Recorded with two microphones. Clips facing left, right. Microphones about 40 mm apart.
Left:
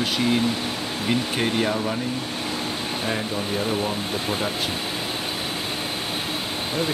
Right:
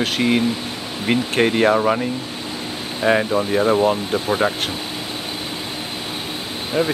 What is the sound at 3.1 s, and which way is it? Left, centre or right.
Speech, right.